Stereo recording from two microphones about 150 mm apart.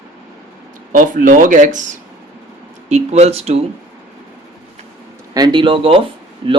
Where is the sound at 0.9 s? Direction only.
60° right (ahead or behind); by 3.6 s 45° right (ahead or behind).